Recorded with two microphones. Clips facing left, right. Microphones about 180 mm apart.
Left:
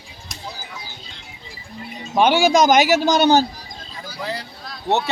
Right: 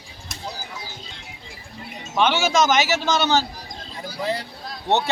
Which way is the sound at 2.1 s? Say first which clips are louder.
Left 5 dB; 40° left (ahead or behind).